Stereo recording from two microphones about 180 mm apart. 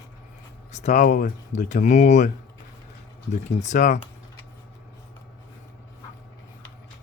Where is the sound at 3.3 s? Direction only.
40° left (ahead or behind).